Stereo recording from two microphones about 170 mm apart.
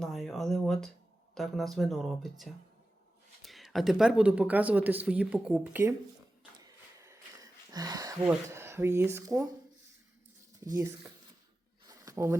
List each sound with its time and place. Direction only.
0.0 s speech: centre (ahead or behind)
3.4 s speech: centre (ahead or behind)
6.6 s a sound: 20° right (ahead or behind)
8.4 s speech: 15° right (ahead or behind)
10.7 s speech: 15° right (ahead or behind)
11.9 s a sound: 20° right (ahead or behind)